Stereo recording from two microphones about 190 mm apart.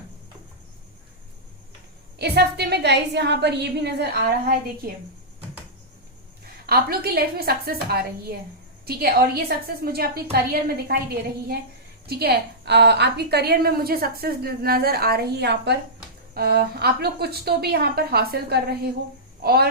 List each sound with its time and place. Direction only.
2.1 s a woman's voice: 60° right (ahead or behind)
6.7 s a woman's voice: 55° right (ahead or behind)
12.0 s a woman's voice: 60° right (ahead or behind)